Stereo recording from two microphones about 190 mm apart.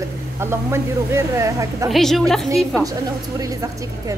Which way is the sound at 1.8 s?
Centre (ahead or behind).